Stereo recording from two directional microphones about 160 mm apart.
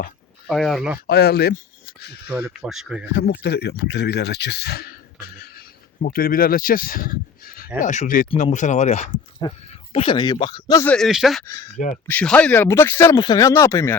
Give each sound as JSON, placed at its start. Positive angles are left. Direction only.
{"t": 0.4, "sound": "speech", "side_deg": 0}
{"t": 1.0, "sound": "speech", "side_deg": 80}
{"t": 2.5, "sound": "speech", "side_deg": -5}
{"t": 3.1, "sound": "speech", "side_deg": 85}
{"t": 7.8, "sound": "speech", "side_deg": 50}
{"t": 9.4, "sound": "speech", "side_deg": 25}
{"t": 10.8, "sound": "speech", "side_deg": 5}
{"t": 11.4, "sound": "speech", "side_deg": 20}